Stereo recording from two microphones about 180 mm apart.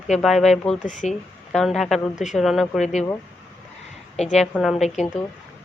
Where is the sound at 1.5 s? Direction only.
Centre (ahead or behind).